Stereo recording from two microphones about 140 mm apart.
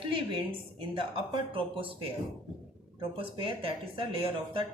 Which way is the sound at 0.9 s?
40° right (ahead or behind).